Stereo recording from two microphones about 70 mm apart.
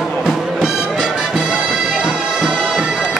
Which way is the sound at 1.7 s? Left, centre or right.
Centre.